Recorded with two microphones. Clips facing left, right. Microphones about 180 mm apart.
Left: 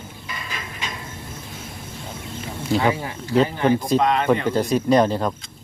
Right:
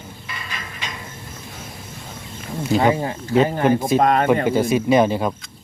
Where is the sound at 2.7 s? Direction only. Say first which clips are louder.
Right 3 dB; 30° right (ahead or behind).